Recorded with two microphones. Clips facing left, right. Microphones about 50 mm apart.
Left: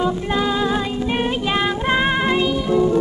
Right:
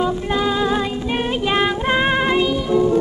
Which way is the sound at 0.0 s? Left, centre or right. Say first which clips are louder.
Right 1 dB; centre.